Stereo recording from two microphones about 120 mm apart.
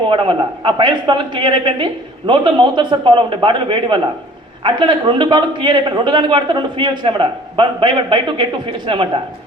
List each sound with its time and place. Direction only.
0.1 s a man's voice: 45° right (ahead or behind)